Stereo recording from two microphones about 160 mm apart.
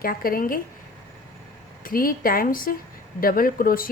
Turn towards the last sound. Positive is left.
turn(degrees=65)  # may be behind; listen again after turning